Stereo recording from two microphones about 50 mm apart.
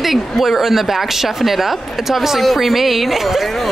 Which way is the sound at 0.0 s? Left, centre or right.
Centre.